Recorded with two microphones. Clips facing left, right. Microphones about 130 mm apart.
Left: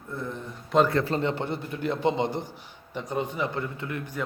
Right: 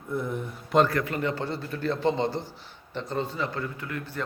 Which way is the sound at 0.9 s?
25° left (ahead or behind).